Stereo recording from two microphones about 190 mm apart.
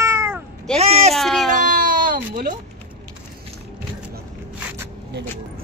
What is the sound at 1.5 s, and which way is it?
Baby cry, 45° right (ahead or behind).